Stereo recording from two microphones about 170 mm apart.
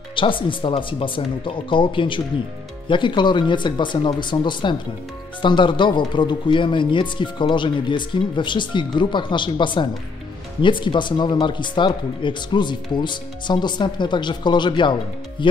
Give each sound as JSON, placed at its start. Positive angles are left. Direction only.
{"t": 0.1, "sound": "speech", "side_deg": 30}